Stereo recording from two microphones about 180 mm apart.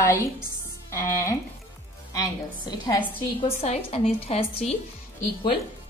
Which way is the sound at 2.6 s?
25° left (ahead or behind).